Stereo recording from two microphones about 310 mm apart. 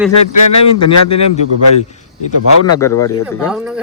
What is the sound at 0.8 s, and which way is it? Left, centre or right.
Speech, left.